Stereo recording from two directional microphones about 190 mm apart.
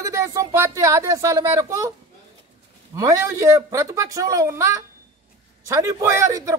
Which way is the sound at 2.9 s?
15° right (ahead or behind).